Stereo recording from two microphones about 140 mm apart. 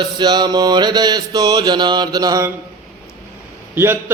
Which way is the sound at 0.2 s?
30° right (ahead or behind).